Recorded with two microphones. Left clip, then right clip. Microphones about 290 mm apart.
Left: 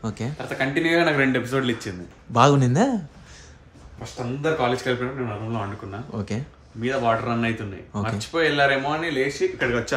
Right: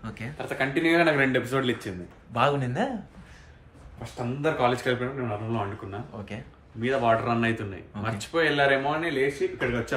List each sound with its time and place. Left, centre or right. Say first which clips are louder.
0.0 s speech: left 7 dB; centre
0.4 s a man's voice: left 2 dB; centre
2.3 s speech: left 7 dB; left
4.0 s a man's voice: left 2 dB; centre